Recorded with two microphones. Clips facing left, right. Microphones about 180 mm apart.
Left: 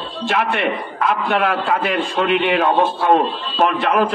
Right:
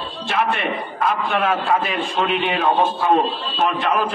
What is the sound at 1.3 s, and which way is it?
A man's voice, 65° left (ahead or behind).